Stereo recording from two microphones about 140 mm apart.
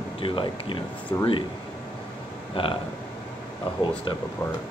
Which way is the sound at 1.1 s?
25° left (ahead or behind).